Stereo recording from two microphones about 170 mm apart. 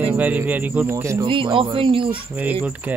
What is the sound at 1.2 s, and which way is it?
Speech, 30° right (ahead or behind).